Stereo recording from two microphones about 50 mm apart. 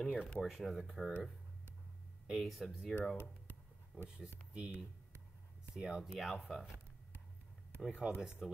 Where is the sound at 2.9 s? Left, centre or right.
Centre.